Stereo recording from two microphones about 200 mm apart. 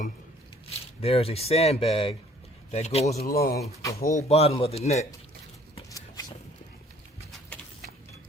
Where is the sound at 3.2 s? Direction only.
50° left (ahead or behind).